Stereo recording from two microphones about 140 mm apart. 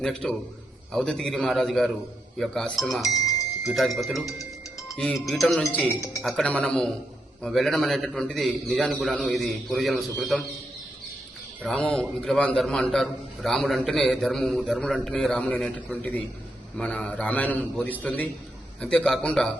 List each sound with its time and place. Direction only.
0.0 s a man's voice: 5° left (ahead or behind)
3.2 s a sound: 25° left (ahead or behind)
3.6 s a man's voice: centre (ahead or behind)
11.6 s a man's voice: 5° left (ahead or behind)